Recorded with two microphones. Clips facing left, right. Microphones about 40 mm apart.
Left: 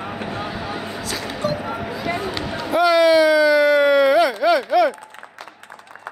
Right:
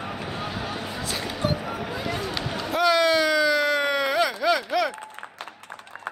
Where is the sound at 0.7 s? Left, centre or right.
Left.